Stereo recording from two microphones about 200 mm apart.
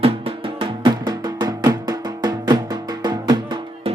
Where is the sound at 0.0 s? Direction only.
30° right (ahead or behind).